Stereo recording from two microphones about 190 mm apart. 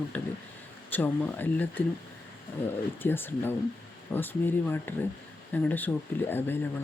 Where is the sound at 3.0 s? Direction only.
10° left (ahead or behind).